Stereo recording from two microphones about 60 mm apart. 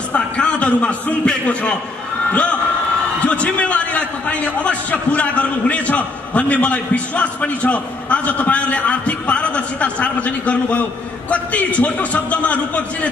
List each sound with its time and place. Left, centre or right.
0.1 s a man's voice: left